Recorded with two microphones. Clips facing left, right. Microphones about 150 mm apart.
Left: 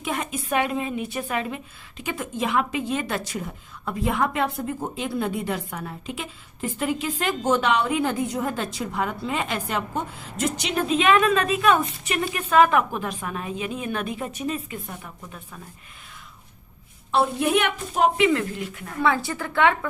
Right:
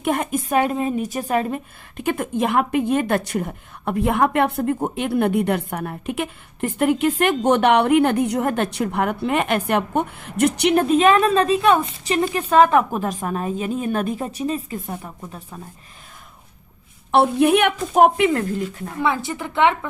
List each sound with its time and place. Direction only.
0.0 s a woman's voice: 50° right (ahead or behind); by 15.4 s 35° right (ahead or behind)
17.1 s a woman's voice: 60° right (ahead or behind)
18.9 s a woman's voice: 20° right (ahead or behind)